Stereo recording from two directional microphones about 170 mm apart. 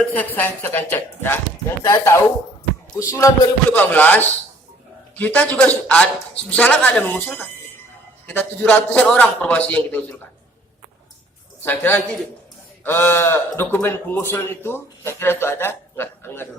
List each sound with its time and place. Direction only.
0.1 s a man's voice: 10° left (ahead or behind)
11.6 s a man's voice: 10° left (ahead or behind)